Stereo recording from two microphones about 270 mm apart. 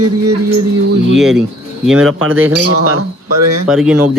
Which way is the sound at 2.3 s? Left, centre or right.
Right.